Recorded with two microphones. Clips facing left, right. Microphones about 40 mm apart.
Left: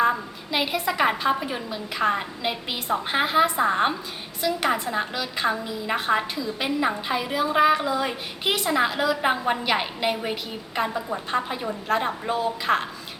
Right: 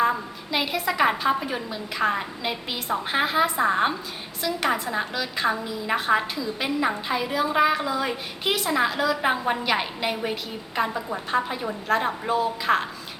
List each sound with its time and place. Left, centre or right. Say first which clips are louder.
0.0 s a woman's voice: left 1 dB; centre